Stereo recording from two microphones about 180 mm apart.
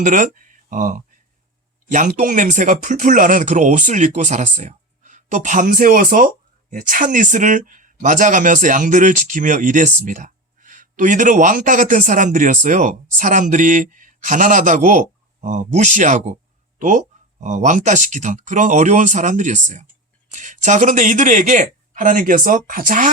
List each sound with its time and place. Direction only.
0.0 s speech: 45° right (ahead or behind)